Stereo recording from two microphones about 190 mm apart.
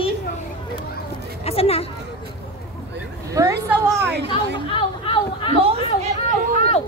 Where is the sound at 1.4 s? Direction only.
30° left (ahead or behind).